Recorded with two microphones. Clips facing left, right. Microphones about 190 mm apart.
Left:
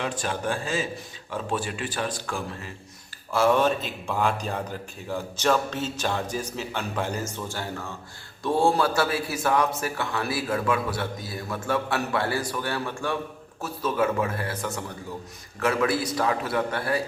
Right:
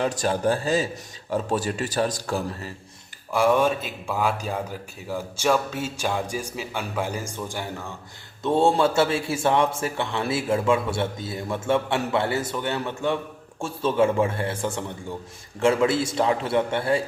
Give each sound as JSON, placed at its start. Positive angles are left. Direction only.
{"t": 0.0, "sound": "speech", "side_deg": -40}
{"t": 3.3, "sound": "speech", "side_deg": -10}
{"t": 8.4, "sound": "a man's voice", "side_deg": -25}